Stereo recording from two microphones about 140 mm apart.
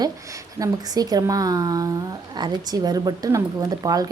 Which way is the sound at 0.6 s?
25° right (ahead or behind).